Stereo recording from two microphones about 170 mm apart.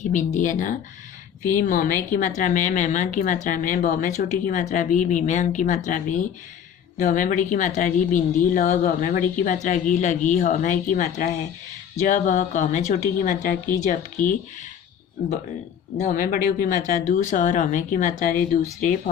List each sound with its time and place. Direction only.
0.1 s a woman's voice: 45° left (ahead or behind)
16.0 s a woman's voice: 50° left (ahead or behind)